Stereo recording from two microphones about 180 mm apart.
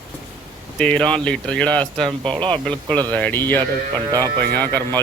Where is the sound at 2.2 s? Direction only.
30° right (ahead or behind).